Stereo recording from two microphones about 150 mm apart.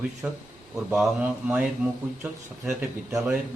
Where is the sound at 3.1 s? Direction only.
20° right (ahead or behind).